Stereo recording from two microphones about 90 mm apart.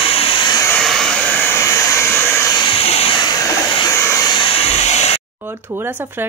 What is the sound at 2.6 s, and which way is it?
Hair dryer, 85° left.